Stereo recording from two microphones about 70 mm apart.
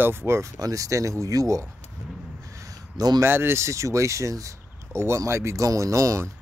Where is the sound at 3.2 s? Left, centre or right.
Right.